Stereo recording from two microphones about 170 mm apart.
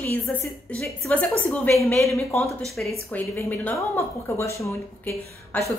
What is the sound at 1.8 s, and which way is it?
Speech, 15° left (ahead or behind).